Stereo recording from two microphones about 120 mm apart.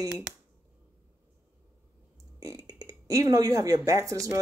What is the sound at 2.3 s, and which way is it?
Speech, 30° right (ahead or behind).